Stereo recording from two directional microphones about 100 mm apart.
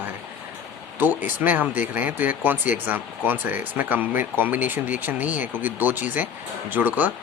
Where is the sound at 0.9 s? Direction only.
20° right (ahead or behind).